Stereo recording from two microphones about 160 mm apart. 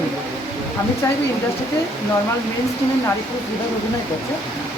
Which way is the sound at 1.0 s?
20° left (ahead or behind).